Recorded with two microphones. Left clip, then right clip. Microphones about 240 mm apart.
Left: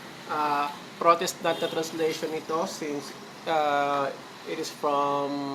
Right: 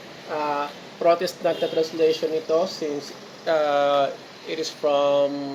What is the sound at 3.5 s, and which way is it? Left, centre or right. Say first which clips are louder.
Speech: right 5 dB; centre.